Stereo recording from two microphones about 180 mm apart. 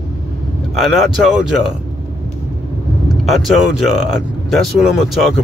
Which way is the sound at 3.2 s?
Centre (ahead or behind).